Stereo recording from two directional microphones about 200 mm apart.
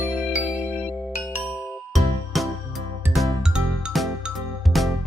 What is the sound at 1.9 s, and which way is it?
Music, centre (ahead or behind).